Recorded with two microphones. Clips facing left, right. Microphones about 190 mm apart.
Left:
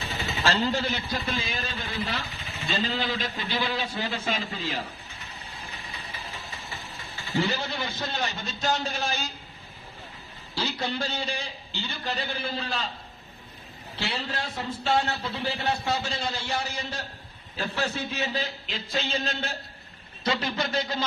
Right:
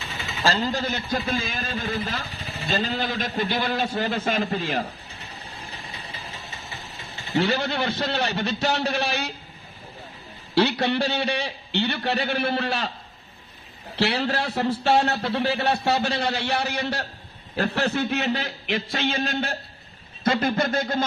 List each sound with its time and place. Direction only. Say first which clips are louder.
0.4 s speech: right 2 dB; 40° right (ahead or behind); by 4.8 s 55° right (ahead or behind)
7.3 s a man's voice: right 5 dB; 70° right (ahead or behind)
10.5 s a man's voice: right 10 dB; 70° right (ahead or behind)
13.9 s a man's voice: right 9 dB; 70° right (ahead or behind); by 21.0 s 50° right (ahead or behind)